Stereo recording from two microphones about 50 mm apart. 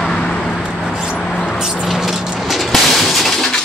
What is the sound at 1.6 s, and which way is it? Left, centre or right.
Vehicle, centre.